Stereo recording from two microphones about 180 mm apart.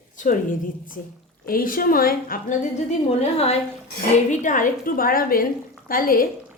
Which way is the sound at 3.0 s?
35° left (ahead or behind).